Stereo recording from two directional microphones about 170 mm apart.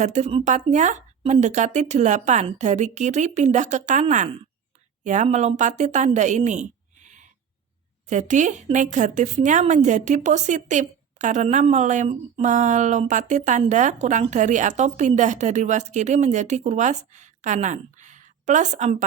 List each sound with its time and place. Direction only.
0.0 s speech: 40° right (ahead or behind)
6.1 s a sound: 45° right (ahead or behind)
8.1 s speech: 45° right (ahead or behind)